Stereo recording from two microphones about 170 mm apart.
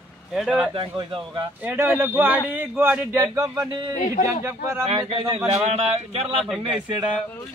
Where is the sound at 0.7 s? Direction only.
30° right (ahead or behind).